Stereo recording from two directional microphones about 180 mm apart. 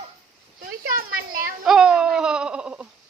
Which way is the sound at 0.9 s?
55° right (ahead or behind).